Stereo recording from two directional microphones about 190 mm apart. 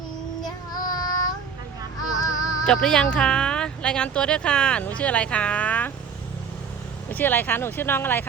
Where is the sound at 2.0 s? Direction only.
20° left (ahead or behind).